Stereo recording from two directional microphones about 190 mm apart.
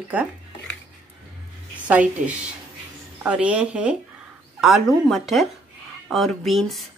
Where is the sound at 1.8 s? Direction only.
10° right (ahead or behind).